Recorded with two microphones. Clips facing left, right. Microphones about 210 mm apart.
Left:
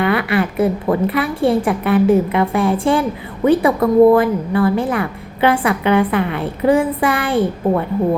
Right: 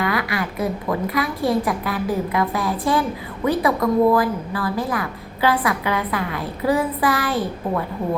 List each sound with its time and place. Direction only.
0.3 s a woman's voice: 30° left (ahead or behind)